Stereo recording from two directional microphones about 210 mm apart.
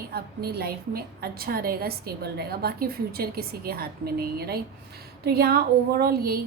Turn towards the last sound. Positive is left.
turn(degrees=-45)  # may be behind; listen again after turning